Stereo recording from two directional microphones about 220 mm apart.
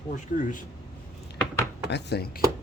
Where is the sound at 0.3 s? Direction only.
40° left (ahead or behind).